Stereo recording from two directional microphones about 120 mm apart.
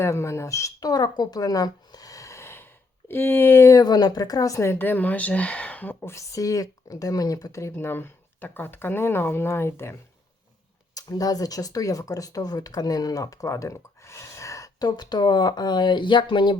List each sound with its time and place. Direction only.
0.0 s speech: 20° left (ahead or behind)
10.9 s speech: 30° left (ahead or behind)